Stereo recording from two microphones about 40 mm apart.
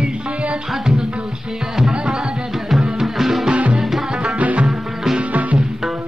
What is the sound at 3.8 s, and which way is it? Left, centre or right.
Music, centre.